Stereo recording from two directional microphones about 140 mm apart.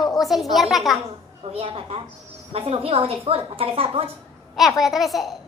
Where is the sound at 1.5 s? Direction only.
45° right (ahead or behind).